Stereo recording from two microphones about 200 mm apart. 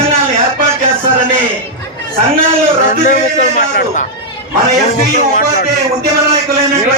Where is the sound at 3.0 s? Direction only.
40° left (ahead or behind).